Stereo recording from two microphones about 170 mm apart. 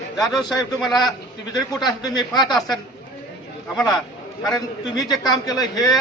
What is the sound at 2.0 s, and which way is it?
Speech, 25° left (ahead or behind).